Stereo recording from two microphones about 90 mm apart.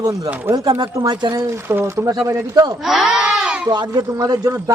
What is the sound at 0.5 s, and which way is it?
Speech, 55° right (ahead or behind).